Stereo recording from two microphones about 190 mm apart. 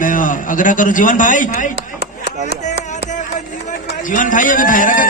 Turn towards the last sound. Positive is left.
turn(degrees=45)  # may be behind; listen again after turning